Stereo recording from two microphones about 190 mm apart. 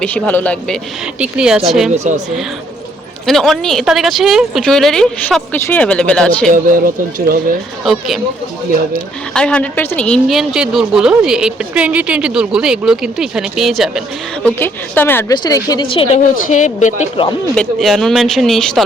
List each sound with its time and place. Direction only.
0.0 s a man's voice: 10° left (ahead or behind)
1.2 s a woman's voice: 5° right (ahead or behind)
3.2 s a woman's voice: centre (ahead or behind)
6.5 s speech: 45° right (ahead or behind)
7.9 s a woman's voice: centre (ahead or behind)
9.3 s a woman's voice: 5° left (ahead or behind)
14.4 s a woman's voice: 10° left (ahead or behind); by 16.2 s 30° left (ahead or behind)
16.3 s speech: 40° left (ahead or behind)
17.5 s a woman's voice: centre (ahead or behind)